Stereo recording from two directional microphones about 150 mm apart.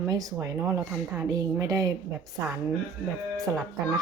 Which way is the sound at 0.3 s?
10° right (ahead or behind).